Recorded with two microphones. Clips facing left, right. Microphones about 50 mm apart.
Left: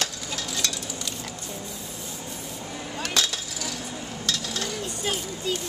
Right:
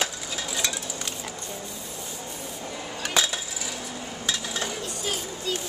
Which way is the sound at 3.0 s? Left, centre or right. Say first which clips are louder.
Right 1 dB; centre.